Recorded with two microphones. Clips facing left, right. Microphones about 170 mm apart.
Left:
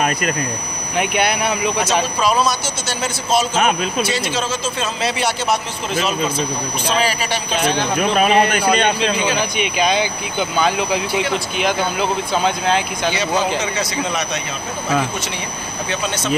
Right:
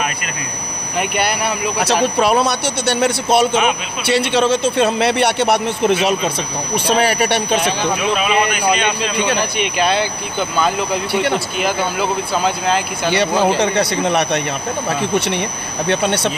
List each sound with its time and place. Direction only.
0.9 s speech: centre (ahead or behind)
2.1 s speech: 65° right (ahead or behind)
8.0 s speech: 45° left (ahead or behind)
9.1 s speech: 65° right (ahead or behind)
9.6 s speech: centre (ahead or behind)
13.1 s speech: 65° right (ahead or behind)
15.9 s speech: 60° right (ahead or behind)